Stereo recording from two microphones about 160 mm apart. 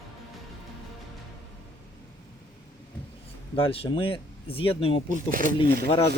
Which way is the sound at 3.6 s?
35° left (ahead or behind).